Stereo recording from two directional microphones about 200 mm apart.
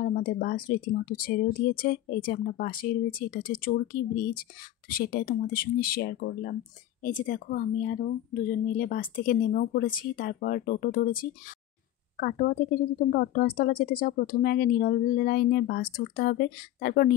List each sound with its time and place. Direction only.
0.0 s speech: 45° left (ahead or behind)